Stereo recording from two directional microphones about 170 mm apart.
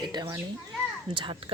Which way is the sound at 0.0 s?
25° right (ahead or behind).